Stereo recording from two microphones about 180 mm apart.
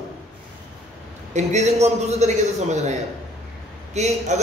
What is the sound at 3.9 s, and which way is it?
Speech, 40° right (ahead or behind).